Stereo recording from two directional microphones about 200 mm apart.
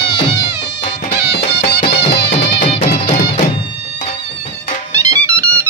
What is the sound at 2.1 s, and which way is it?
Music, 55° left (ahead or behind).